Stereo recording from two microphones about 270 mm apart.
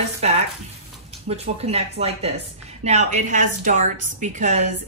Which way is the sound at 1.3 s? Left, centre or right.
Right.